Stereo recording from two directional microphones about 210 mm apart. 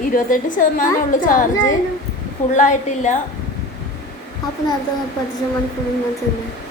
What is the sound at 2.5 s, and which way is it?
Speech, 35° left (ahead or behind).